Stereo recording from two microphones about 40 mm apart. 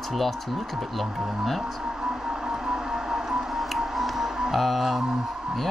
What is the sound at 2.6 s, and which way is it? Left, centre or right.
Train, centre.